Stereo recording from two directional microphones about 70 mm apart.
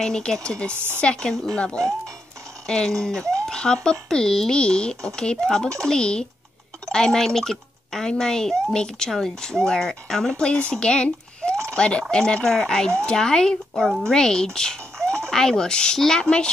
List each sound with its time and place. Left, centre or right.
0.0 s speech: centre
0.7 s speech: right
1.0 s speech: centre
1.6 s speech: centre